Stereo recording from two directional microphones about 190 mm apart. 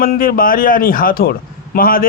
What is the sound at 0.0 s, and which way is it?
A man's voice, 50° left (ahead or behind).